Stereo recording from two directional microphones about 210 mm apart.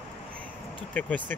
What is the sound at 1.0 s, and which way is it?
Speech, 5° left (ahead or behind).